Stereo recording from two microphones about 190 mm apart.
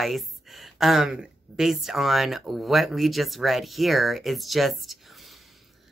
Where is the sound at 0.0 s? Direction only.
Centre (ahead or behind).